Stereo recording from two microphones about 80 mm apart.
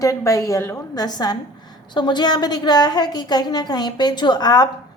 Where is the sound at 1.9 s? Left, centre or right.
Left.